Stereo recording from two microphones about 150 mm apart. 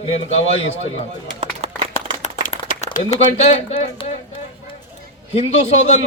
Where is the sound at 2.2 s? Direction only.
55° left (ahead or behind).